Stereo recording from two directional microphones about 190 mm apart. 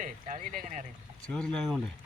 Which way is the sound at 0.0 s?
45° right (ahead or behind).